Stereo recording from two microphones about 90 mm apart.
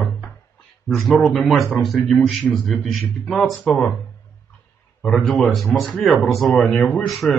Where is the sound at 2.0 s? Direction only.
10° left (ahead or behind).